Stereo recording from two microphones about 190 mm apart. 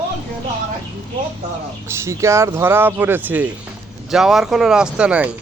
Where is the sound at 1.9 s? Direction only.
15° right (ahead or behind).